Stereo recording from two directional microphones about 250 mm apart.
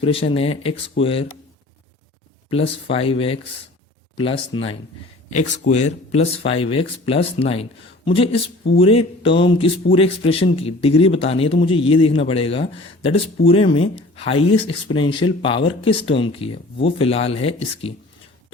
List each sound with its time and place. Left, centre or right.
0.0 s speech: left
2.5 s speech: left